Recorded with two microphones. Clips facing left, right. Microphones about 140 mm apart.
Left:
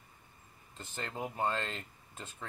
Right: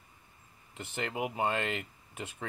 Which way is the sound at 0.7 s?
70° right (ahead or behind).